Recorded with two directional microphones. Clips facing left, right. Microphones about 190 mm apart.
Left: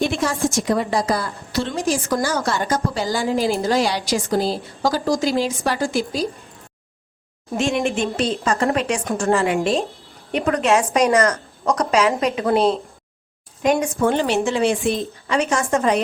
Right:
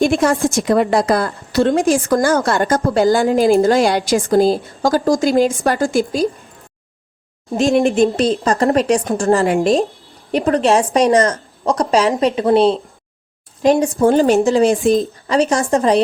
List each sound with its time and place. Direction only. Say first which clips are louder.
0.0 s a woman's voice: right 6 dB; 50° right (ahead or behind)
7.5 s speech: right 7 dB; 35° right (ahead or behind)